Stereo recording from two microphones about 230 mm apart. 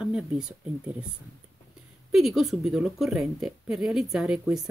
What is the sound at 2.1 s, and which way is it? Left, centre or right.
A woman's voice, centre.